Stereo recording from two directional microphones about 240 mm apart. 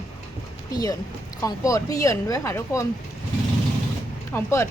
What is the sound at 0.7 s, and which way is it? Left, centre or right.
Speech, centre.